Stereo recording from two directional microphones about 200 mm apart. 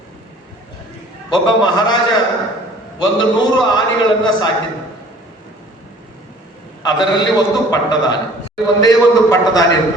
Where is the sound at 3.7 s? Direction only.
20° left (ahead or behind).